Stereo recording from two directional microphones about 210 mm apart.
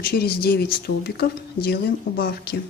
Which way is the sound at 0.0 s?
50° left (ahead or behind).